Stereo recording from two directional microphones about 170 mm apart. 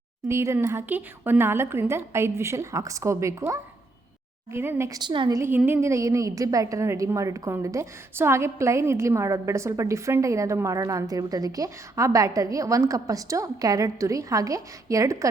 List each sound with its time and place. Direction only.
0.3 s a woman's voice: 15° right (ahead or behind)
5.4 s a woman's voice: 15° right (ahead or behind)